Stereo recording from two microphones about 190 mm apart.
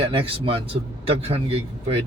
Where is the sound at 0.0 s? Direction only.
30° right (ahead or behind).